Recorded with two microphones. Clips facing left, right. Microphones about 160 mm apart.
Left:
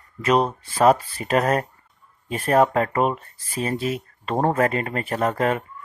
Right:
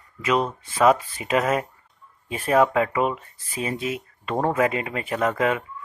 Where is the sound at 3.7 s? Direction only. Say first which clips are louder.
Left 3 dB; 40° left (ahead or behind).